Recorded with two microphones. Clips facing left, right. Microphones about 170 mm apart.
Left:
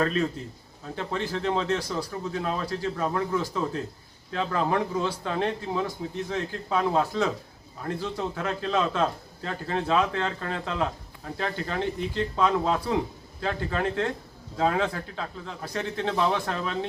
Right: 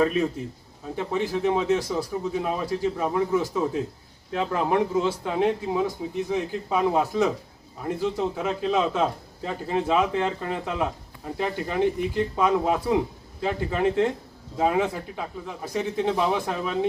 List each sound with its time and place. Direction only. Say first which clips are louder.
0.0 s speech: right 3 dB; 10° right (ahead or behind)